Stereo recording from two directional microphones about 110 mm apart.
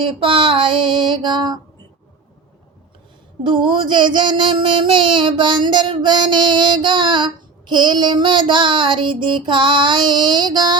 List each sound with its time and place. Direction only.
0.0 s child singing: 50° right (ahead or behind)
3.4 s child singing: 50° right (ahead or behind)